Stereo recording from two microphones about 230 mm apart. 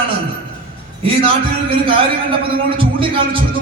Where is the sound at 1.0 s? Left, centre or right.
Right.